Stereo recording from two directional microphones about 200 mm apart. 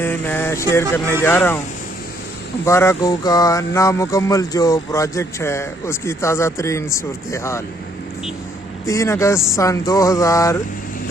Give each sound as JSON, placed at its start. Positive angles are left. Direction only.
{"t": 0.0, "sound": "a sound", "side_deg": 10}
{"t": 0.7, "sound": "music", "side_deg": 15}
{"t": 2.6, "sound": "music", "side_deg": 15}
{"t": 8.9, "sound": "music", "side_deg": 15}